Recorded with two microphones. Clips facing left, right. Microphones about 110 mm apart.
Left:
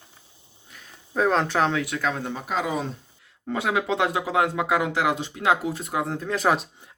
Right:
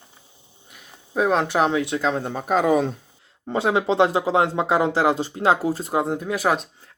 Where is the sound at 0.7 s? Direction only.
10° right (ahead or behind); by 2.3 s 30° right (ahead or behind).